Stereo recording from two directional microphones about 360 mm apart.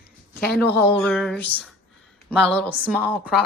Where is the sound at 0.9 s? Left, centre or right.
Centre.